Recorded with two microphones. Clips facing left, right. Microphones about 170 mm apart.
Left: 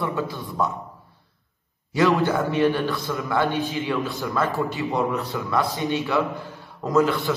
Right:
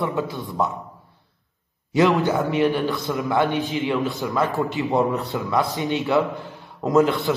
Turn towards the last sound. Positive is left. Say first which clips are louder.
# right 2 dB
turn(degrees=-20)  # may be behind; listen again after turning